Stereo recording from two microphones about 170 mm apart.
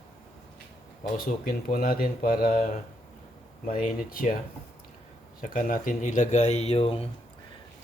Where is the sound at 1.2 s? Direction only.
60° left (ahead or behind).